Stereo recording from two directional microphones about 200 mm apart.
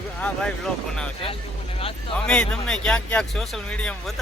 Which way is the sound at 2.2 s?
5° left (ahead or behind).